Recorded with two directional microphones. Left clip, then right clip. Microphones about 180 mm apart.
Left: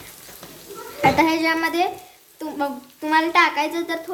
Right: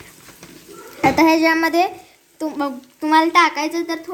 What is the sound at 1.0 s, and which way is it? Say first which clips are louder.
A child's voice: right 3 dB; 25° right (ahead or behind).